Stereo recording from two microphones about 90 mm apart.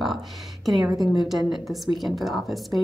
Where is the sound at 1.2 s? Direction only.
Centre (ahead or behind).